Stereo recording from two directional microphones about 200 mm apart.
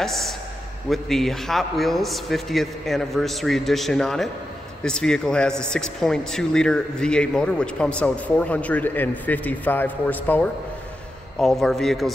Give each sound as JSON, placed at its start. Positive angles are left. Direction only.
{"t": 0.0, "sound": "speech", "side_deg": 0}